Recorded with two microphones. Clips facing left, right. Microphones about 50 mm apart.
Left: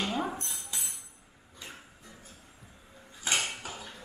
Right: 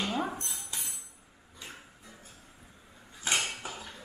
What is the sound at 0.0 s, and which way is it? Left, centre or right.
Cutlery, centre.